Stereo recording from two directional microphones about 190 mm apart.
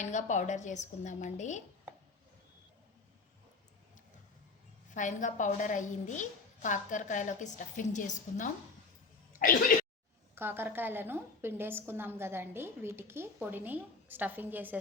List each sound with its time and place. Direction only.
0.0 s a woman's voice: 40° left (ahead or behind)
4.9 s a woman's voice: 40° left (ahead or behind)
10.3 s a woman's voice: 10° right (ahead or behind)